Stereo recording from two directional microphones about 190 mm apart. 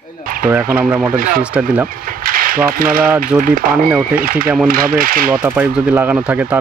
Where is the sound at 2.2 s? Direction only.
50° right (ahead or behind).